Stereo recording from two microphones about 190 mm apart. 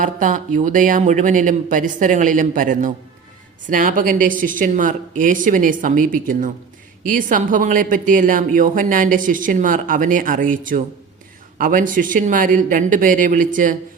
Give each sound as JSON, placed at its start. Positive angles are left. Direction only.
{"t": 0.0, "sound": "speech", "side_deg": -45}